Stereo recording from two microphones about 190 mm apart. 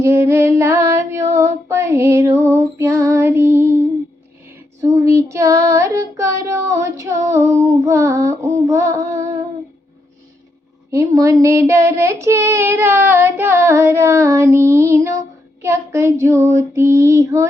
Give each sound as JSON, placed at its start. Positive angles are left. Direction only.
{"t": 0.0, "sound": "female singing", "side_deg": -15}
{"t": 4.4, "sound": "child singing", "side_deg": -15}
{"t": 10.9, "sound": "child singing", "side_deg": -15}